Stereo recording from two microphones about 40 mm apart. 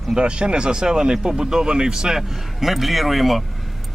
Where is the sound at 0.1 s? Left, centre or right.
Right; by 3.4 s centre.